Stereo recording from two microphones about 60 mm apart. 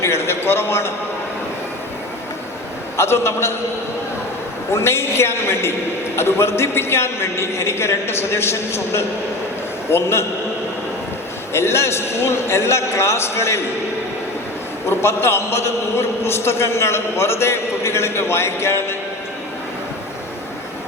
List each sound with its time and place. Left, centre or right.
0.0 s a man's voice: left
3.0 s a man's voice: left
4.7 s a man's voice: left
11.5 s a man's voice: left
14.8 s a man's voice: left